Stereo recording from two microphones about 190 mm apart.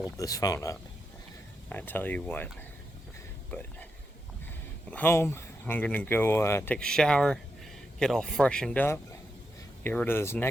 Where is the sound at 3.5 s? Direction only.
10° left (ahead or behind).